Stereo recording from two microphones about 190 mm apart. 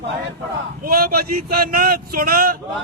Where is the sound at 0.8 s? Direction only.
50° right (ahead or behind).